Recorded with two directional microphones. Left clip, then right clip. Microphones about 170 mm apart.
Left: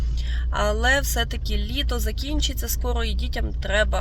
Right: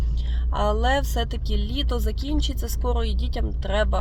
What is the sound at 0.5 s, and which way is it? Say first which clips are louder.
Speech: left 1 dB; 5° right (ahead or behind).